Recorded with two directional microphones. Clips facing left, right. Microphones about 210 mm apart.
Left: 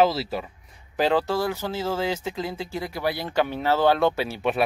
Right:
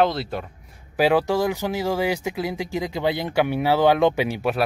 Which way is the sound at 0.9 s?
10° right (ahead or behind).